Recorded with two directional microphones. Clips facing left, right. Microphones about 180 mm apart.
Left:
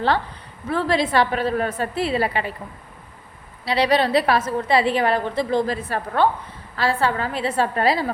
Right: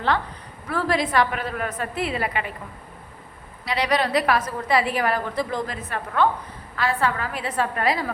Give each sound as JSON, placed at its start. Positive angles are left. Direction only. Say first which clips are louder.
{"t": 0.7, "sound": "a woman's voice", "louder": "left 3 dB", "side_deg": 25}
{"t": 3.7, "sound": "a woman's voice", "louder": "left 4 dB", "side_deg": 30}